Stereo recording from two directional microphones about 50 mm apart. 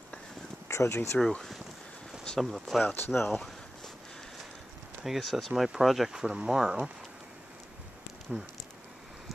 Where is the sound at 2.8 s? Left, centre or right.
Left.